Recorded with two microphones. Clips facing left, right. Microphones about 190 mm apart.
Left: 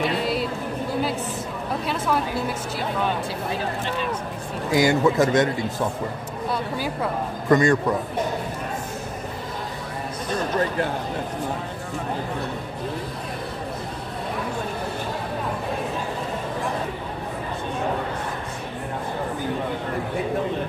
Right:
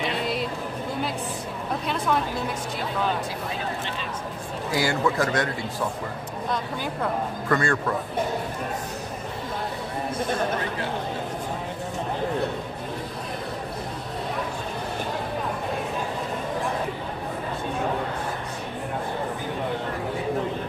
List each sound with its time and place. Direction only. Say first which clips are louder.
0.2 s a sound: left 3 dB; centre (ahead or behind)
4.7 s a man's voice: left 5 dB; 20° left (ahead or behind)
6.5 s speech: left 2 dB; 5° left (ahead or behind)
7.4 s speech: left 7 dB; 20° left (ahead or behind)